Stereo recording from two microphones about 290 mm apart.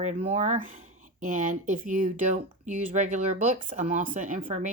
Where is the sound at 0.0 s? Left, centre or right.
Right.